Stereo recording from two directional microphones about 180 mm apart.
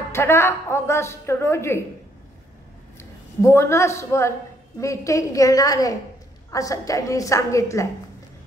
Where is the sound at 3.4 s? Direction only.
15° left (ahead or behind).